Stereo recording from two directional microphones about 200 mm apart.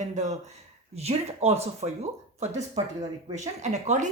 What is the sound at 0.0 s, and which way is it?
Speech, 35° right (ahead or behind).